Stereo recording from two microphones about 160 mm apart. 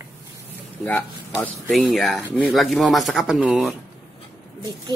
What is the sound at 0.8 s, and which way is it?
Speech, 15° left (ahead or behind).